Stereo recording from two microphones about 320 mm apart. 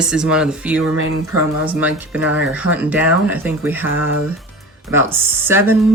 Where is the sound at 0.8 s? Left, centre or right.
Right.